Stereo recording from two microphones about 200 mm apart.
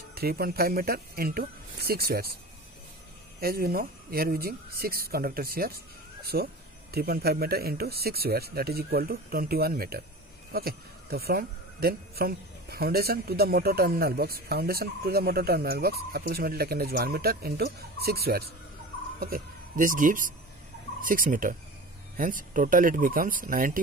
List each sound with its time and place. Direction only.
0.1 s speech: 50° right (ahead or behind)
3.3 s speech: 50° right (ahead or behind)